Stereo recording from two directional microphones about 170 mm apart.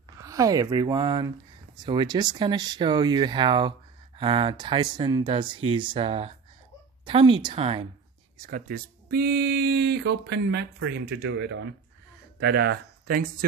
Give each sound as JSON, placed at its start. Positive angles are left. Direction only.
{"t": 0.2, "sound": "speech", "side_deg": -20}
{"t": 8.4, "sound": "speech", "side_deg": -50}
{"t": 12.4, "sound": "speech", "side_deg": -70}